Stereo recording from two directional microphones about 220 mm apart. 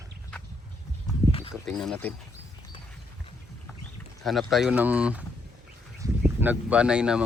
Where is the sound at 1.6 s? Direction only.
Centre (ahead or behind).